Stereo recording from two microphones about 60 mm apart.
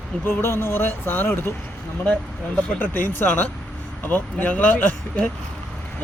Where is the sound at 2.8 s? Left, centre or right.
Left.